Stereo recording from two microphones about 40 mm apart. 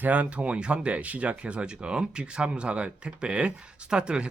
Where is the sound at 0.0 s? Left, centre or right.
Right.